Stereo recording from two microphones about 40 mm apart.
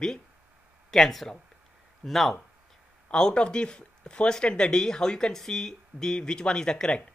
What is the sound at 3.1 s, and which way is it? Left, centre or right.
Speech, left.